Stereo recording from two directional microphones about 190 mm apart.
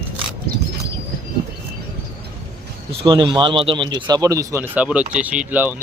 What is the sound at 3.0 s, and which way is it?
Speech, 25° right (ahead or behind).